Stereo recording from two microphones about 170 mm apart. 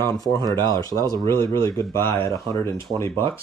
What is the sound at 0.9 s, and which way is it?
Speech, 20° right (ahead or behind).